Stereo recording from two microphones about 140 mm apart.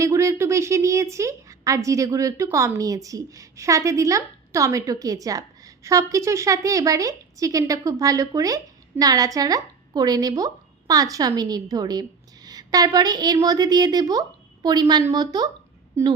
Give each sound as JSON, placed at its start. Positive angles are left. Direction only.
{"t": 0.0, "sound": "a woman's voice", "side_deg": -20}